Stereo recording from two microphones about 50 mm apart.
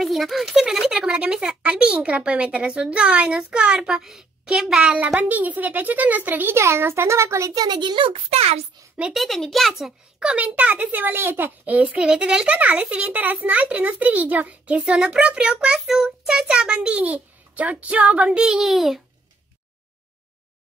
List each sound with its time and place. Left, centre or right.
0.0 s speech: centre
1.0 s a child's voice: centre
4.8 s a child's voice: right
6.5 s a child's voice: right
9.1 s a child's voice: centre
10.1 s a child's voice: centre
10.4 s a child's voice: right
12.5 s a child's voice: right
18.6 s a child's voice: centre